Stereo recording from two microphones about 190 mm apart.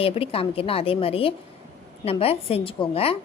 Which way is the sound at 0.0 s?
30° left (ahead or behind).